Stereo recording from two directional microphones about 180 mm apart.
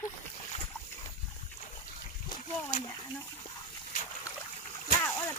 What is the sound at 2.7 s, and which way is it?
Speech, 50° left (ahead or behind).